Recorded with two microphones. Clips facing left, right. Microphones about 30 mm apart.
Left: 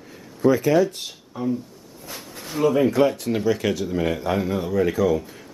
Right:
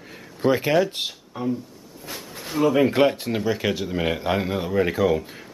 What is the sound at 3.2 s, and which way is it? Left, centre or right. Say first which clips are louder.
Speech: left 2 dB; centre.